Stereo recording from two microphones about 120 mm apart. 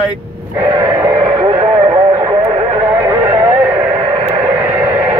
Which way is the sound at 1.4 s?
45° right (ahead or behind).